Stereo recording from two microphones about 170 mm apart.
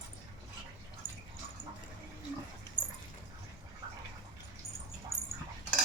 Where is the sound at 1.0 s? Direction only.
40° left (ahead or behind).